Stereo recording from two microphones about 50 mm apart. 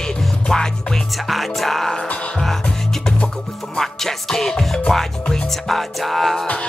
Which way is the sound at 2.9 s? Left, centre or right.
Centre.